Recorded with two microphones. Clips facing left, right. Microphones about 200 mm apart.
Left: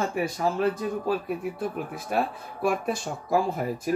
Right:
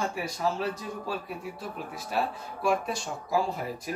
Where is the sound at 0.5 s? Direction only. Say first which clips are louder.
Left 7 dB; 55° left (ahead or behind).